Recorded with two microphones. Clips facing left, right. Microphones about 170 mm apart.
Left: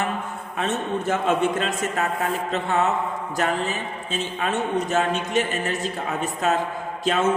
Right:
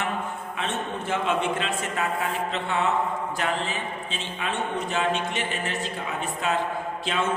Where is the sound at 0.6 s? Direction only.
40° left (ahead or behind).